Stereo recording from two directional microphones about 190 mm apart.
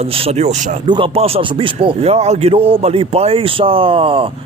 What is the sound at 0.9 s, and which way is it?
Speech, 30° right (ahead or behind).